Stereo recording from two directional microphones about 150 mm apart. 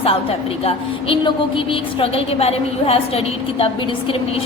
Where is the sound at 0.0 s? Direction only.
40° left (ahead or behind).